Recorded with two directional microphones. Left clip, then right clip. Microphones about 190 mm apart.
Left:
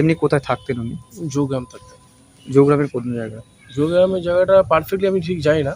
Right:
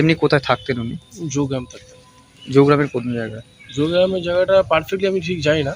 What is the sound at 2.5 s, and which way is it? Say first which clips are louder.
Speech: even; centre (ahead or behind).